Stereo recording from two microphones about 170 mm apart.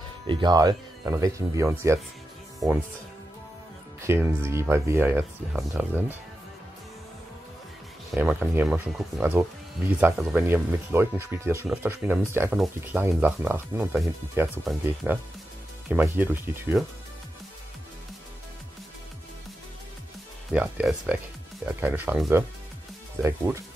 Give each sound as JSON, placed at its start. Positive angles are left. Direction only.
{"t": 0.3, "sound": "speech", "side_deg": -25}
{"t": 4.0, "sound": "speech", "side_deg": -15}
{"t": 8.2, "sound": "speech", "side_deg": -10}
{"t": 15.9, "sound": "speech", "side_deg": -10}
{"t": 20.5, "sound": "speech", "side_deg": -10}
{"t": 23.2, "sound": "speech", "side_deg": -15}